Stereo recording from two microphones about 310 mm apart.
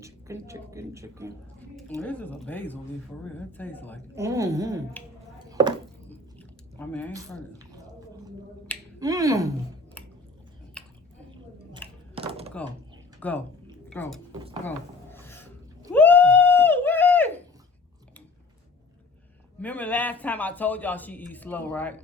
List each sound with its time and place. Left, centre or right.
0.0 s a woman's voice: centre
2.0 s a man's voice: centre
4.1 s a woman's voice: centre
5.5 s a sound: centre
6.7 s speech: centre
7.1 s a woman's voice: centre
9.0 s a woman's voice: centre
10.0 s a sound: centre
10.8 s chewing: centre
11.8 s a sound: centre
12.1 s typing: centre
13.1 s speech: centre
15.1 s a sound: centre
19.5 s a man's voice: centre